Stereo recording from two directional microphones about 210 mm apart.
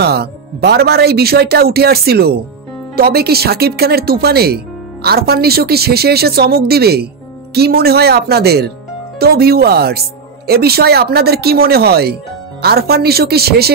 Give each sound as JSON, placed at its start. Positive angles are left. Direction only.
{"t": 0.0, "sound": "speech", "side_deg": -50}